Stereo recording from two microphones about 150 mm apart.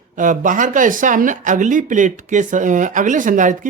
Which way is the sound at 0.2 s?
60° right (ahead or behind).